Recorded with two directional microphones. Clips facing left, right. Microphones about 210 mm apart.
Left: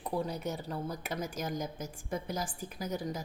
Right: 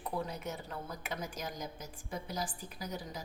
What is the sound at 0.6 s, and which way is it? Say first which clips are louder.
A woman's voice: left 5 dB; 35° left (ahead or behind).